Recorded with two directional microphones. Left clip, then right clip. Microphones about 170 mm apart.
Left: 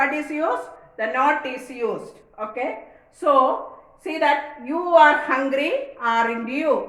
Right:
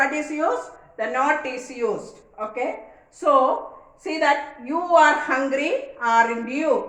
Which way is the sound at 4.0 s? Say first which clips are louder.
Even; 10° left (ahead or behind).